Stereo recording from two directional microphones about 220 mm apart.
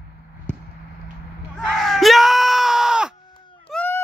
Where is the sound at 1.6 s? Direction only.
Centre (ahead or behind).